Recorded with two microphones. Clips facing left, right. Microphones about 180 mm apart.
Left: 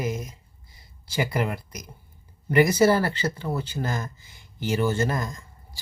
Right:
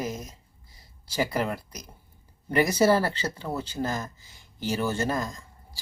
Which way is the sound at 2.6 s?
35° right (ahead or behind).